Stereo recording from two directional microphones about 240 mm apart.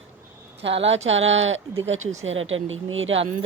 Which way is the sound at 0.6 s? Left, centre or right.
Right.